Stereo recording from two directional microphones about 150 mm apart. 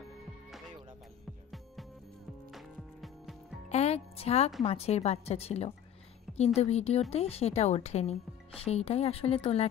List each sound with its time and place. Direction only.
2.5 s music: centre (ahead or behind)
3.6 s music: 45° left (ahead or behind)
4.6 s a woman's voice: 45° left (ahead or behind)